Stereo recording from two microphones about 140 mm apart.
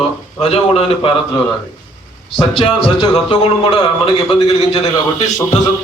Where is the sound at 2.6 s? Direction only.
40° left (ahead or behind).